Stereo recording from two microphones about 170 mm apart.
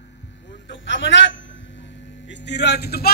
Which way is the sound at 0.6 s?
90° left.